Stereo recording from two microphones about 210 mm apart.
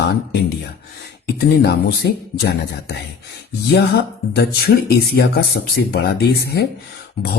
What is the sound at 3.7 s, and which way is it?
Speech, 50° left (ahead or behind).